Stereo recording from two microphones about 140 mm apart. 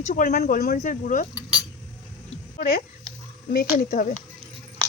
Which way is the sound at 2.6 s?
90° left.